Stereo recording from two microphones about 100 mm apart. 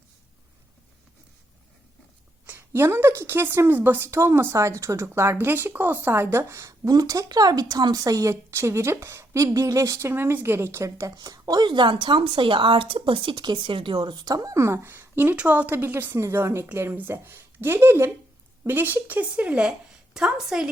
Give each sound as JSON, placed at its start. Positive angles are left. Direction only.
{"t": 2.5, "sound": "a woman's voice", "side_deg": -25}